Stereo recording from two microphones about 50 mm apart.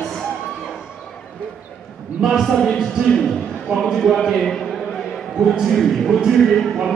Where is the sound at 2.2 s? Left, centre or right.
Centre.